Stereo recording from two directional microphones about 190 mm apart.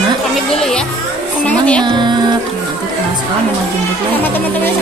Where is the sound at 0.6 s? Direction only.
Centre (ahead or behind).